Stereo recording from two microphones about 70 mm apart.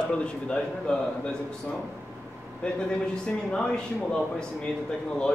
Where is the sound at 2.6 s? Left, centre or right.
Centre.